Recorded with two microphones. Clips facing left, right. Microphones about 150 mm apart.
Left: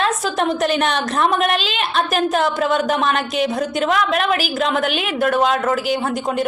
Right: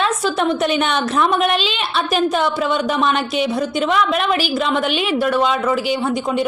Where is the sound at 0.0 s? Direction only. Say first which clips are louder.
Right 1 dB; centre (ahead or behind).